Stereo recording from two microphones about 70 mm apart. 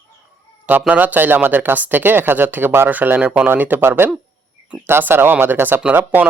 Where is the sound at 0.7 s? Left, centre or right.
Right.